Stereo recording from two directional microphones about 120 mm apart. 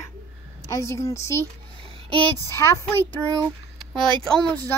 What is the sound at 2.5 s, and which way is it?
Speech, 20° left (ahead or behind).